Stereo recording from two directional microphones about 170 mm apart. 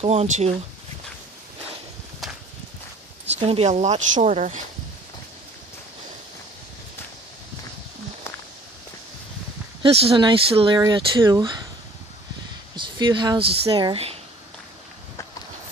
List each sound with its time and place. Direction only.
0.0 s speech: 40° right (ahead or behind)
2.2 s clip-clop: centre (ahead or behind)
3.3 s speech: 35° right (ahead or behind)
9.8 s speech: 35° right (ahead or behind)
12.7 s speech: 25° right (ahead or behind)